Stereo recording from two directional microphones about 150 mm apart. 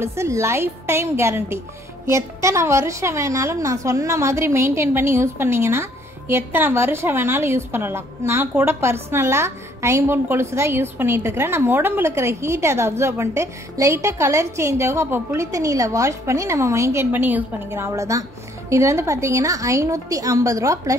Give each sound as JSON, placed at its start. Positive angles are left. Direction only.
{"t": 0.0, "sound": "a woman's voice", "side_deg": -15}